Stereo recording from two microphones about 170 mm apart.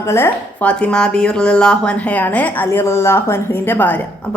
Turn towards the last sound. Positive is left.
turn(degrees=10)  # may be behind; listen again after turning